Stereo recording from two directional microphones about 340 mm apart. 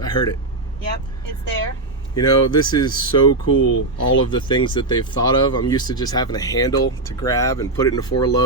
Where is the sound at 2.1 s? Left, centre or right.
Centre.